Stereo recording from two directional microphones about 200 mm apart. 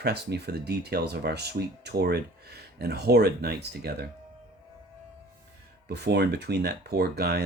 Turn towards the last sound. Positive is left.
turn(degrees=-55)  # may be behind; listen again after turning